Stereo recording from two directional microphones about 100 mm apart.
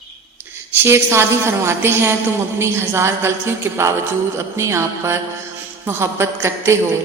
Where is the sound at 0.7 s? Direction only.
20° right (ahead or behind).